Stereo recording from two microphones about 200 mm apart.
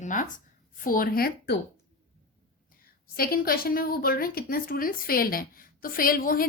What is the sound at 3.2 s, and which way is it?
A woman's voice, 45° left (ahead or behind).